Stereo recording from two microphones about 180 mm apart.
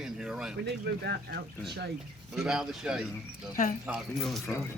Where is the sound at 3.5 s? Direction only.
45° left (ahead or behind).